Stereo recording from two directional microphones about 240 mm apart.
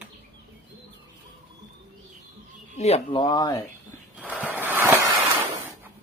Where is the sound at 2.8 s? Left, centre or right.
Left.